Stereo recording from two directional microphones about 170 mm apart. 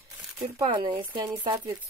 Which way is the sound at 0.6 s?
25° right (ahead or behind).